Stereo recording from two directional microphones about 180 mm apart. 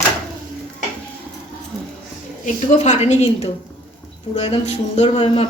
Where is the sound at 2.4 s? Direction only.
40° left (ahead or behind).